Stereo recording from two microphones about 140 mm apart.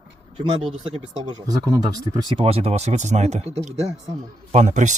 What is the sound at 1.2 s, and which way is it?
Speech, 30° right (ahead or behind).